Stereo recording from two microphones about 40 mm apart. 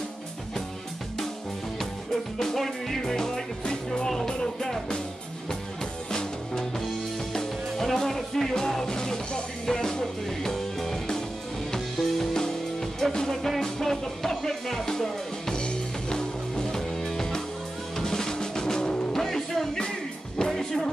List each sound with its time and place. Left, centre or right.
2.3 s music: centre
7.3 s music: centre
15.5 s music: left
17.9 s drum: centre
19.1 s music: centre